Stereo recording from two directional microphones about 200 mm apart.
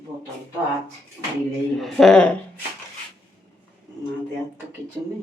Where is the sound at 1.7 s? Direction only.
Centre (ahead or behind).